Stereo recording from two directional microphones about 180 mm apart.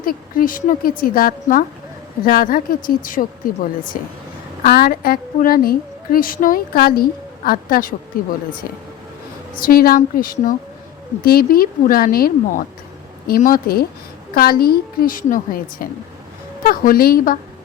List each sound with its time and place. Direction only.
0.0 s a woman's voice: 50° left (ahead or behind)
9.6 s a woman's voice: 55° left (ahead or behind)